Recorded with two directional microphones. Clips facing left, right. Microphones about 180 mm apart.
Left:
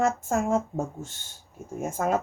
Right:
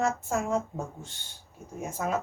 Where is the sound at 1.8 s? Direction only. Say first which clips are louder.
Left 4 dB; 50° left (ahead or behind).